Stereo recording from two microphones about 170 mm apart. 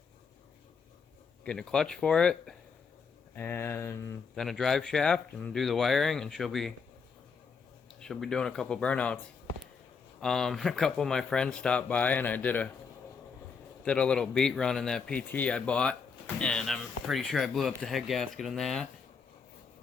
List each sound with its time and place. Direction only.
1.5 s a man's voice: 5° left (ahead or behind)
4.4 s a man's voice: centre (ahead or behind)
7.9 s a man's voice: centre (ahead or behind)
10.2 s a man's voice: 5° left (ahead or behind)
13.8 s a man's voice: 5° left (ahead or behind)